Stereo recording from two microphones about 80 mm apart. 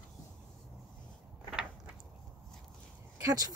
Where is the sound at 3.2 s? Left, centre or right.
Right.